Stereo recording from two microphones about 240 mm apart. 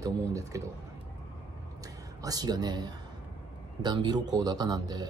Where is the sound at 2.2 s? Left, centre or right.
Centre.